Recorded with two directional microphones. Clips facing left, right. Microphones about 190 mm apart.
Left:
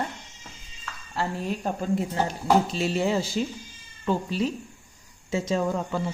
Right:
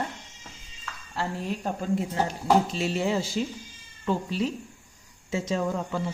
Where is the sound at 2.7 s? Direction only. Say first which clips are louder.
Left 2 dB; 35° left (ahead or behind).